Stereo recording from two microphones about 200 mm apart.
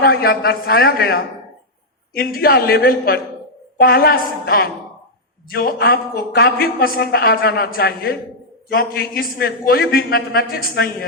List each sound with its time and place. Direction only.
0.0 s a woman's voice: 50° left (ahead or behind)